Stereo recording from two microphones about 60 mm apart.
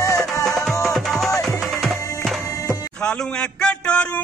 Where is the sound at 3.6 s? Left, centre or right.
Centre.